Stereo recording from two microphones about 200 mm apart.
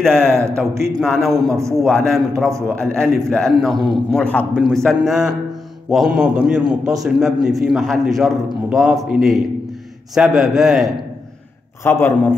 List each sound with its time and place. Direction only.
0.1 s speech: 10° right (ahead or behind)
1.0 s a man's voice: centre (ahead or behind)
1.3 s speech: 15° right (ahead or behind)
1.8 s a man's voice: centre (ahead or behind)
11.8 s a man's voice: 10° left (ahead or behind)